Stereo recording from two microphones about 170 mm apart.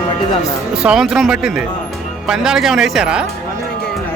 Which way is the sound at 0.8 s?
5° right (ahead or behind).